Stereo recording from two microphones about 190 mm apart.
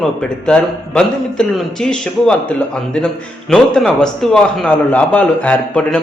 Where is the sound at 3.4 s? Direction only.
5° left (ahead or behind).